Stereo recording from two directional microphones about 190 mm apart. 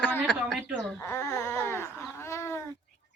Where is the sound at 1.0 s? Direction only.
15° left (ahead or behind).